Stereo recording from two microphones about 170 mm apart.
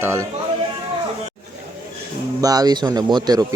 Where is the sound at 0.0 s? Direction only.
15° right (ahead or behind).